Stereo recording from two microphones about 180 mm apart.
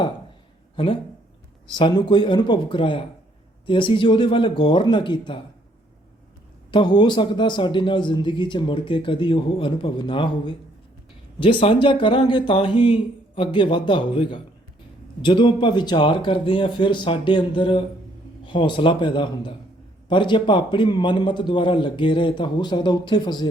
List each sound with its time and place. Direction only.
1.6 s a man's voice: 25° left (ahead or behind)
6.7 s a man's voice: 25° left (ahead or behind)